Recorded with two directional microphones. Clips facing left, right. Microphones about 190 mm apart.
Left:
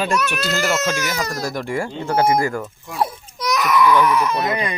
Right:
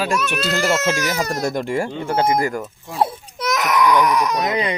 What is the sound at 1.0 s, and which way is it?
Speech, 30° right (ahead or behind).